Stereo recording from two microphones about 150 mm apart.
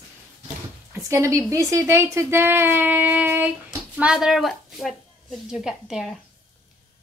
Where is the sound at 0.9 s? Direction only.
20° right (ahead or behind); by 6.1 s centre (ahead or behind).